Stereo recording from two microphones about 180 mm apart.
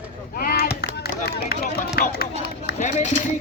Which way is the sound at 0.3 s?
55° left (ahead or behind).